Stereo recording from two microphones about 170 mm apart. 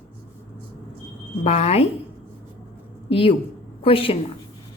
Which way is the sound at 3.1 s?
35° left (ahead or behind).